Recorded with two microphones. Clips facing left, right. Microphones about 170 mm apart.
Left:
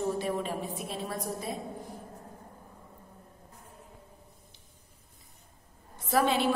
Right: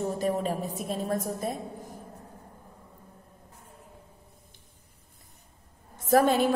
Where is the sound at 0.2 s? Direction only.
40° right (ahead or behind).